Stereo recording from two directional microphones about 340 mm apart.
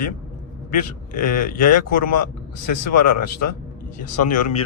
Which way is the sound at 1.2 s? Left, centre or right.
Left.